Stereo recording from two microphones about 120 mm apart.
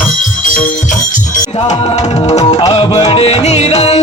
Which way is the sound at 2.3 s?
70° left (ahead or behind).